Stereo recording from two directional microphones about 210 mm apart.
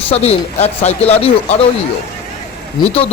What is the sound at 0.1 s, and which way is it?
Speech, 30° left (ahead or behind).